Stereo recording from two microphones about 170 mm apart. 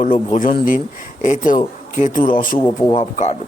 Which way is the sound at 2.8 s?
30° left (ahead or behind).